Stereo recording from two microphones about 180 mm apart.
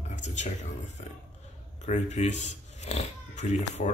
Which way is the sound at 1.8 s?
40° left (ahead or behind).